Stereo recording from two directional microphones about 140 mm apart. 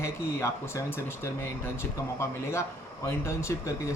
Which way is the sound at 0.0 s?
20° left (ahead or behind).